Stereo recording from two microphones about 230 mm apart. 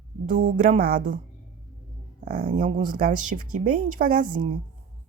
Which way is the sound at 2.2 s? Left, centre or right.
Right.